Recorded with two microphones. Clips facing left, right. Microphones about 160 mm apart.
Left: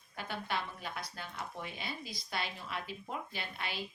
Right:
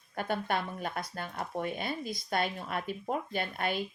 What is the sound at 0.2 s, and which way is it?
Speech, 50° right (ahead or behind).